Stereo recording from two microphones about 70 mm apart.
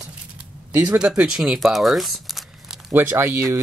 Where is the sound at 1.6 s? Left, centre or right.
Centre.